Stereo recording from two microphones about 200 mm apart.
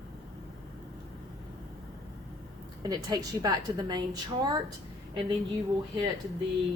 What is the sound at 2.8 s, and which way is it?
A woman's voice, 20° right (ahead or behind).